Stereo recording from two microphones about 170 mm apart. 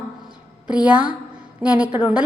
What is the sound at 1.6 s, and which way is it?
Speech, 10° right (ahead or behind).